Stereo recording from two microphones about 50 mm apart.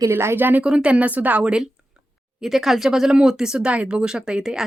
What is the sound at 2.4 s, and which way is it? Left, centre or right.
Speech, centre.